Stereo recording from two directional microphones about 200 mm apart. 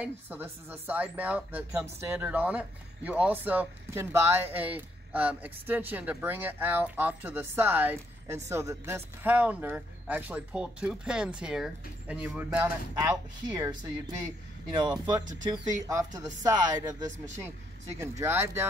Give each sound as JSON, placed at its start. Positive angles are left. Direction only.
{"t": 0.0, "sound": "speech", "side_deg": -10}
{"t": 14.7, "sound": "speech", "side_deg": -20}